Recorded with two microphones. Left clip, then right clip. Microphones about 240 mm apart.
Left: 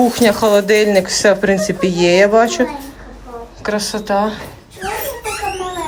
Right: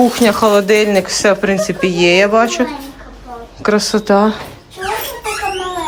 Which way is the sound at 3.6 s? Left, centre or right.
Right.